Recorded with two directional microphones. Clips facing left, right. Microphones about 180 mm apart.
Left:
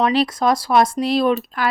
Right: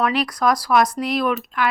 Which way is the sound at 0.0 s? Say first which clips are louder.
Left 3 dB; 30° left (ahead or behind).